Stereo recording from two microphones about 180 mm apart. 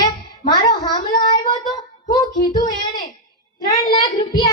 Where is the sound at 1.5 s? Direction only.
25° left (ahead or behind).